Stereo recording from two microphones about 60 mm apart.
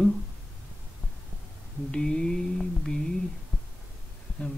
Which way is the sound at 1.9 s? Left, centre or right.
Centre.